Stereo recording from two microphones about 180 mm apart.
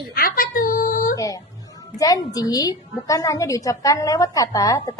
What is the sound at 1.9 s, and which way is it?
A woman's voice, 20° left (ahead or behind).